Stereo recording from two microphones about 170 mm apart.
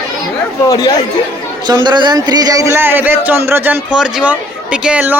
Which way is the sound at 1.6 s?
25° right (ahead or behind).